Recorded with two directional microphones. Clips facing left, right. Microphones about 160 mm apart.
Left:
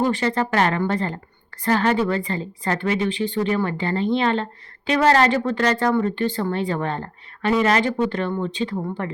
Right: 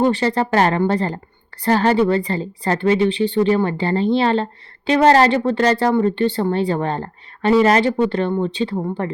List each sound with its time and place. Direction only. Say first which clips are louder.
0.0 s speech: right 4 dB; 30° right (ahead or behind)